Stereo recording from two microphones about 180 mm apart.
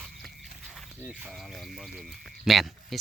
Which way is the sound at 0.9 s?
10° right (ahead or behind).